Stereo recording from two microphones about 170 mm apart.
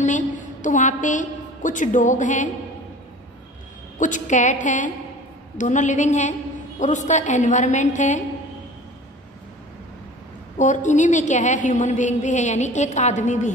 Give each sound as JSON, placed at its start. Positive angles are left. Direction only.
{"t": 0.0, "sound": "a woman's voice", "side_deg": 45}
{"t": 4.0, "sound": "a woman's voice", "side_deg": 45}
{"t": 10.6, "sound": "a woman's voice", "side_deg": 45}